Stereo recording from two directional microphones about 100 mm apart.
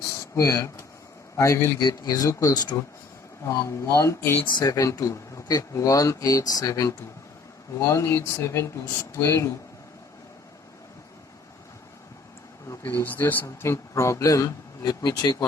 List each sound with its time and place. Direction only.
0.2 s speech: 25° left (ahead or behind)
1.8 s speech: 40° left (ahead or behind)
3.4 s speech: 30° left (ahead or behind)
4.4 s speech: 45° left (ahead or behind)
12.8 s speech: 20° left (ahead or behind); by 15.4 s 40° left (ahead or behind)